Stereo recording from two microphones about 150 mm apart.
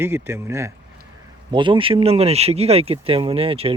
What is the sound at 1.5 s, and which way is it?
Speech, 30° right (ahead or behind).